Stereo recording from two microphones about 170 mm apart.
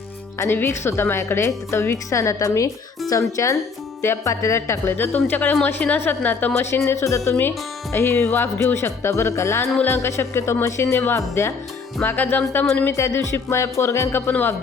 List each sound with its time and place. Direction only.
0.3 s a woman's voice: 15° left (ahead or behind)